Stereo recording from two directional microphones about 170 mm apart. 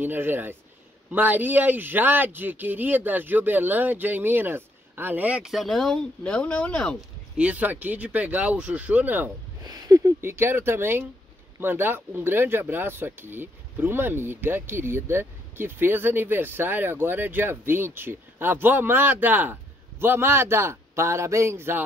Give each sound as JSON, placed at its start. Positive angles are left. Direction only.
{"t": 0.0, "sound": "speech", "side_deg": -10}
{"t": 7.3, "sound": "speech", "side_deg": -10}